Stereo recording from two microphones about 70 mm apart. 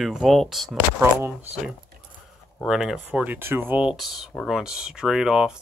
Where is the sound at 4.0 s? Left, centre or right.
Centre.